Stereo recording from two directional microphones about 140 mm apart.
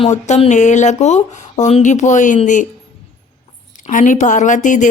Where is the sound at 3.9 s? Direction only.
65° left (ahead or behind).